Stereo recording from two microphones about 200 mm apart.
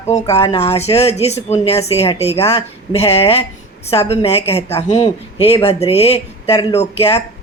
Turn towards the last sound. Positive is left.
turn(degrees=30)  # may be behind; listen again after turning